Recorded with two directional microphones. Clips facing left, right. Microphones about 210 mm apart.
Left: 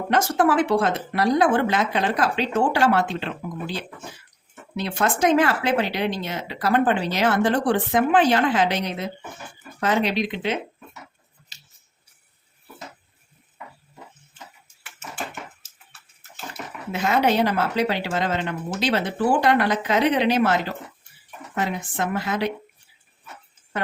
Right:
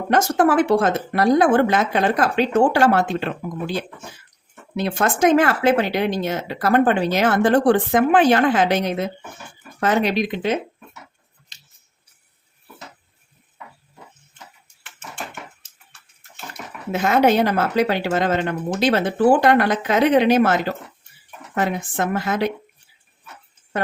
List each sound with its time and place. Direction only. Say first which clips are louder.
0.1 s speech: right 3 dB; 45° right (ahead or behind)
4.8 s speech: right 3 dB; 50° right (ahead or behind)
14.8 s a sound: even; 5° left (ahead or behind)
16.9 s speech: right 4 dB; 50° right (ahead or behind)